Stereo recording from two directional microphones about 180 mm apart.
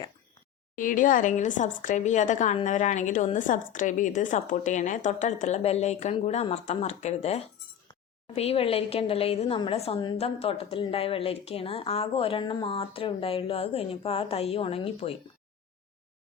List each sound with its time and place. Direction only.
0.8 s a woman's voice: 50° left (ahead or behind)